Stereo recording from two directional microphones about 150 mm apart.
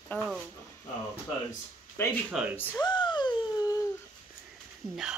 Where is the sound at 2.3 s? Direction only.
Centre (ahead or behind).